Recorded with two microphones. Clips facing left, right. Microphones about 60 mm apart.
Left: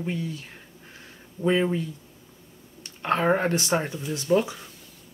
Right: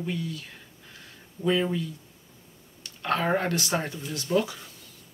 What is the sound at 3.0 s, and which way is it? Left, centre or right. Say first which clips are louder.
Speech: left 3 dB; left.